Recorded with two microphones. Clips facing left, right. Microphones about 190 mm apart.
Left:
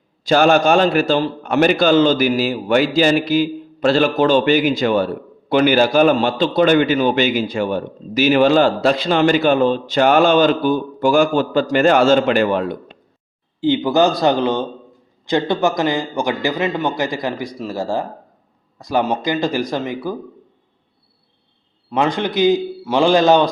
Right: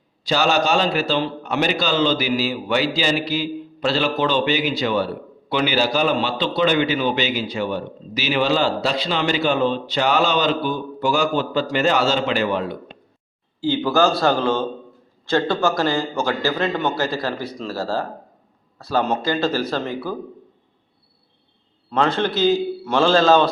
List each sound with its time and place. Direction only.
0.3 s a man's voice: 55° left (ahead or behind)
13.6 s a man's voice: 20° left (ahead or behind)
21.8 s a man's voice: 15° left (ahead or behind)